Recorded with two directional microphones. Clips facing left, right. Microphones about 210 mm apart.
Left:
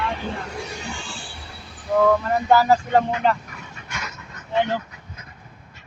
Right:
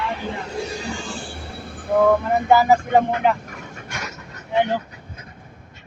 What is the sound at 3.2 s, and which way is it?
Speech, 15° right (ahead or behind).